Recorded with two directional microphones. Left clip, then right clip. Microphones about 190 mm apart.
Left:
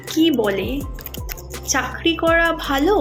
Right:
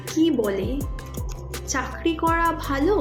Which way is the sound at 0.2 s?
10° right (ahead or behind).